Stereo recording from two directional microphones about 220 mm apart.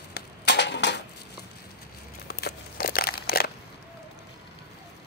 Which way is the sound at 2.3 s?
50° left (ahead or behind).